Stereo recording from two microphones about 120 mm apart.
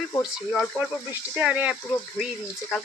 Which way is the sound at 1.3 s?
10° right (ahead or behind).